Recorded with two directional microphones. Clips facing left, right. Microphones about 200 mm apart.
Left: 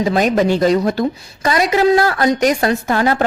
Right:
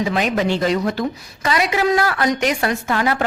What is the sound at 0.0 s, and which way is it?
A woman's voice, 40° left (ahead or behind).